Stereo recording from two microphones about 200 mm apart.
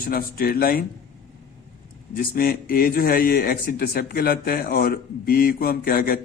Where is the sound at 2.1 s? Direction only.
50° left (ahead or behind).